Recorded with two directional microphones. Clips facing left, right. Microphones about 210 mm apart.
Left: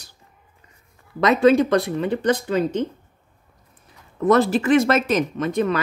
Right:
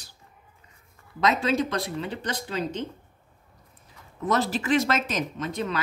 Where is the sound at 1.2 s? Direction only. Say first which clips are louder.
Left 9 dB; 55° left (ahead or behind).